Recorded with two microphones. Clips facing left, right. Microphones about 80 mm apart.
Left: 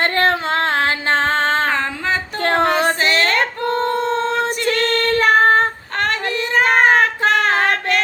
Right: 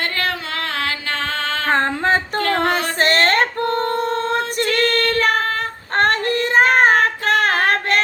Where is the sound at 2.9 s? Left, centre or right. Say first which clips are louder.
Right 1 dB; right.